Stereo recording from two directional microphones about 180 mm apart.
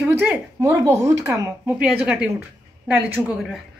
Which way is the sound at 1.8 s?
5° right (ahead or behind).